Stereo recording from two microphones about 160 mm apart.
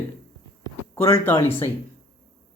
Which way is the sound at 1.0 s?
15° left (ahead or behind).